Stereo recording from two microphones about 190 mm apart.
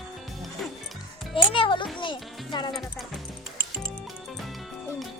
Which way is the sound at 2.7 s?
Centre (ahead or behind).